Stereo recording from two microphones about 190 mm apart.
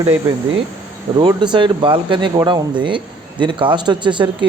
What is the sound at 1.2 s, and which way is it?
A man's voice, 25° right (ahead or behind).